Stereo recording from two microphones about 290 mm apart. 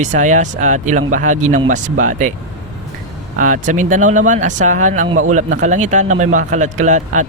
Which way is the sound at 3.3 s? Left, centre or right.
Right.